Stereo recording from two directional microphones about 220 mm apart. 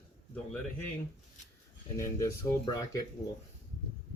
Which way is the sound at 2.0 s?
15° left (ahead or behind).